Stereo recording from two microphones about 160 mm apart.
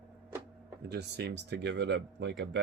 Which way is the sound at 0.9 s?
90° right.